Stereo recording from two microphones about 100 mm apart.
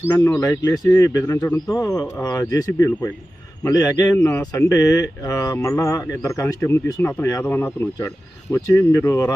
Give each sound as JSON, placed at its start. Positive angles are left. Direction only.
{"t": 0.0, "sound": "speech", "side_deg": 15}
{"t": 0.3, "sound": "speech", "side_deg": 35}
{"t": 7.3, "sound": "speech", "side_deg": 35}
{"t": 7.5, "sound": "speech", "side_deg": 20}